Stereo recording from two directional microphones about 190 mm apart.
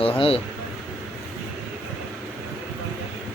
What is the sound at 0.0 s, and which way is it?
Speech, 30° left (ahead or behind).